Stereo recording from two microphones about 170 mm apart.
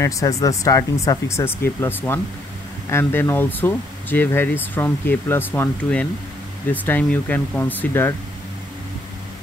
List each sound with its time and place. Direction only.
0.0 s speech: 20° left (ahead or behind)